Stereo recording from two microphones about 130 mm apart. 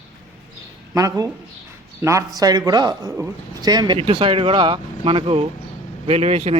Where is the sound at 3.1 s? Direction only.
20° right (ahead or behind).